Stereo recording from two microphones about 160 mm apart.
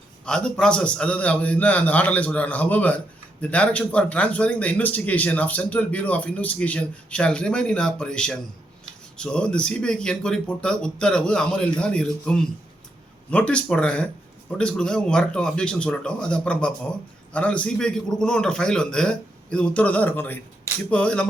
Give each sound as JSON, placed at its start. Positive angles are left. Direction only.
{"t": 0.3, "sound": "a man's voice", "side_deg": 5}